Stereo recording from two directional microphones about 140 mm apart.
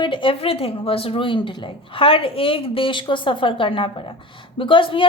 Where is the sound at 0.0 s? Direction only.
35° left (ahead or behind).